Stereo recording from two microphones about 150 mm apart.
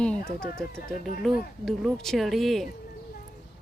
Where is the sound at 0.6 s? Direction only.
5° left (ahead or behind).